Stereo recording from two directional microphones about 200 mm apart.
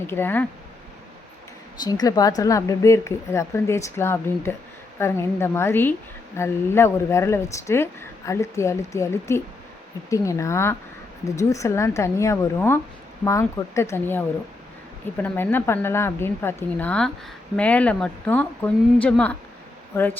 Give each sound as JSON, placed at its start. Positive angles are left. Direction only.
{"t": 0.1, "sound": "a woman's voice", "side_deg": 10}
{"t": 1.8, "sound": "a woman's voice", "side_deg": 20}